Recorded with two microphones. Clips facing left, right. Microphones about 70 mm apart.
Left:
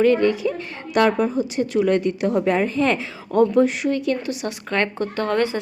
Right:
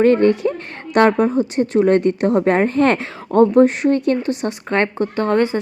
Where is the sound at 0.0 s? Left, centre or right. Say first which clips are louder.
Right 4 dB; right.